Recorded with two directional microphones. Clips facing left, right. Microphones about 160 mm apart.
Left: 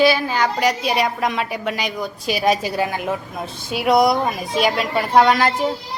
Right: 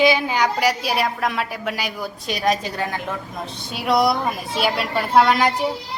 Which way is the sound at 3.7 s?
Centre (ahead or behind).